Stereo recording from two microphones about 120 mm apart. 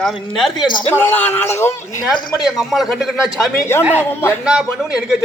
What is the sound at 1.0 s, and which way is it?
A man's voice, 15° left (ahead or behind).